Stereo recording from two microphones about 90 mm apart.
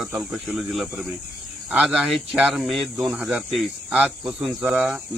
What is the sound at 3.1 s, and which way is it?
Speech, 10° right (ahead or behind).